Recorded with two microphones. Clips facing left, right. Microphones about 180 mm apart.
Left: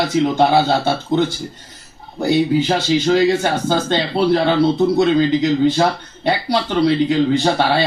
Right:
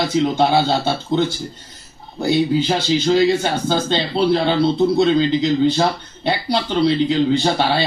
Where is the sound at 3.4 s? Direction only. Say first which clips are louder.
Left 1 dB; 15° left (ahead or behind).